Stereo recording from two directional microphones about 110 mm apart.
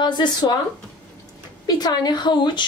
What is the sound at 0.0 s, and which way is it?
Speech, 40° left (ahead or behind).